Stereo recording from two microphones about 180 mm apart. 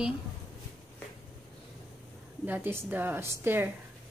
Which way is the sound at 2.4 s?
10° right (ahead or behind).